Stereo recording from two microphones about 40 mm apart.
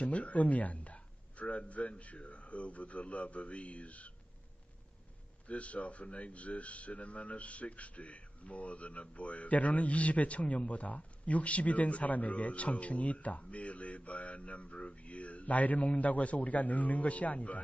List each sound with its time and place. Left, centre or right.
0.0 s speech: left
5.5 s speech: left